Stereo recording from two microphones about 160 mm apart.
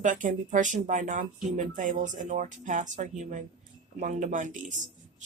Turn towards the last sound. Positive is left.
turn(degrees=-50)  # may be behind; listen again after turning